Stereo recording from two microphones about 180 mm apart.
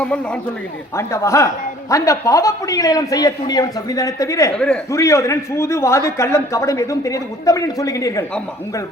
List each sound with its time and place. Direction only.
0.9 s a man's voice: 15° left (ahead or behind)
4.5 s a man's voice: 5° left (ahead or behind)
4.9 s a man's voice: 15° left (ahead or behind)